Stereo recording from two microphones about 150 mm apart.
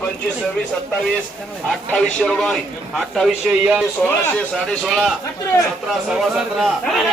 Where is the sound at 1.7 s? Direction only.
5° left (ahead or behind).